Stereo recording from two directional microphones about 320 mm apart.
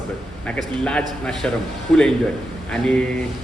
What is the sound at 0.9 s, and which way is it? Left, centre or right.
Speech, centre.